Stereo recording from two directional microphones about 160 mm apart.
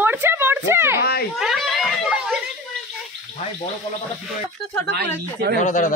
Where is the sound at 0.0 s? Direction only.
15° right (ahead or behind).